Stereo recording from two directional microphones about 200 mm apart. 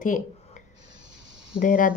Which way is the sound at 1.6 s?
40° left (ahead or behind).